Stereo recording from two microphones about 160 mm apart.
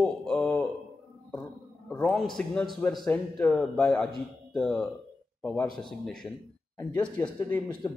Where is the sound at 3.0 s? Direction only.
15° left (ahead or behind).